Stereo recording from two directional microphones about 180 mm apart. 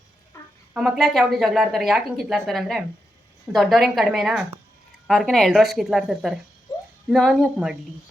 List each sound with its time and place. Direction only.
0.7 s a woman's voice: centre (ahead or behind)
6.7 s a sound: 25° left (ahead or behind)
7.1 s a woman's voice: centre (ahead or behind)